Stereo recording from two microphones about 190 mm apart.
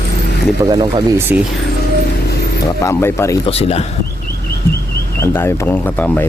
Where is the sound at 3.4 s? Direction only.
30° left (ahead or behind).